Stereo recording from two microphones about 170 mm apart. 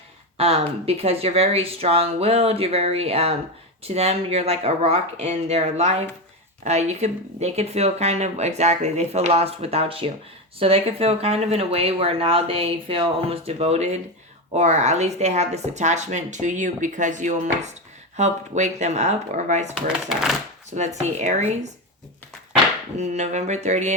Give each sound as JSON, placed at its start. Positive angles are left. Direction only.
{"t": 0.3, "sound": "speech", "side_deg": -35}
{"t": 19.7, "sound": "speech", "side_deg": 0}
{"t": 20.7, "sound": "speech", "side_deg": -45}
{"t": 23.0, "sound": "speech", "side_deg": -45}